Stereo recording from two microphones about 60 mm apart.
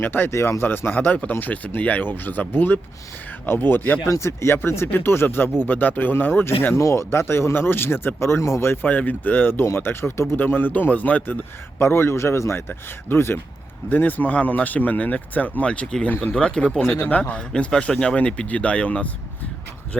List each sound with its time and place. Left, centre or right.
0.0 s speech: left
0.3 s speech: left
0.6 s speech: left
4.0 s speech: left
6.7 s speech: left
8.9 s speech: left
10.4 s speech: left
11.8 s a man's voice: left